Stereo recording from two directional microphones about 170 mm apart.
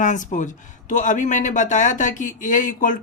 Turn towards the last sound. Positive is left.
turn(degrees=50)  # may be behind; listen again after turning